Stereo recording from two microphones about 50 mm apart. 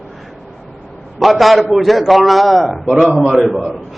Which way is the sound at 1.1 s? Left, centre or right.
Centre.